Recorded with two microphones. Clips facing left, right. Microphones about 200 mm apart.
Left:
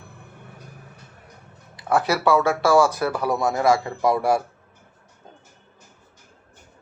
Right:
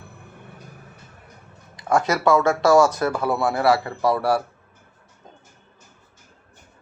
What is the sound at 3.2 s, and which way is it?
Speech, 15° left (ahead or behind).